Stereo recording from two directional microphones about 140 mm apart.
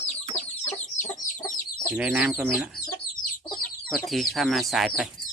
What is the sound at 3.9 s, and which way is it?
Speech, centre (ahead or behind).